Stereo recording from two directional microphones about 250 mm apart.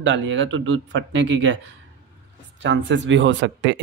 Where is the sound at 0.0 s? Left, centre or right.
Right.